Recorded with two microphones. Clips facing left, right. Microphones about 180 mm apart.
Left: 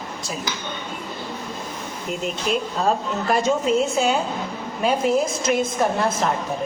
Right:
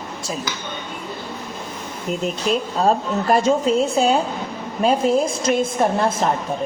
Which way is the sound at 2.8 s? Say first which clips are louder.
Right 5 dB; 35° right (ahead or behind).